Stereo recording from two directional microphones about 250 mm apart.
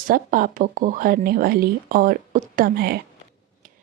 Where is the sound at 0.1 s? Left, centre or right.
Right.